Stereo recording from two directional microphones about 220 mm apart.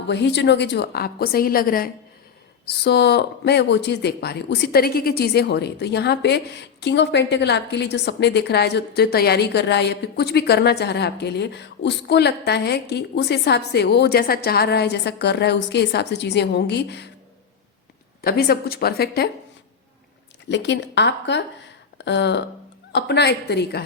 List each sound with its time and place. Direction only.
0.1 s speech: 50° left (ahead or behind)
18.2 s speech: 45° left (ahead or behind)
20.5 s speech: 50° left (ahead or behind)
21.9 s a sound: 50° left (ahead or behind)
22.9 s speech: 50° left (ahead or behind)